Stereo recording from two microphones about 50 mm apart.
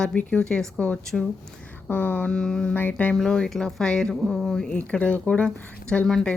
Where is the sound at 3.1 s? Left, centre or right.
Centre.